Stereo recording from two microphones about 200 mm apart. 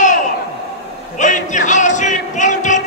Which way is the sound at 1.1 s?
40° left (ahead or behind).